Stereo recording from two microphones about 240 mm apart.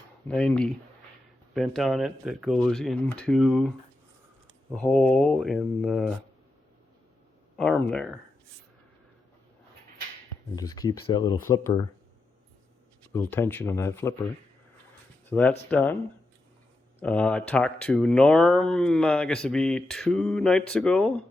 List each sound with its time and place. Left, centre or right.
0.3 s speech: centre
4.7 s speech: centre
7.5 s speech: centre
10.5 s speech: centre
13.1 s speech: centre
15.3 s speech: centre
17.0 s speech: centre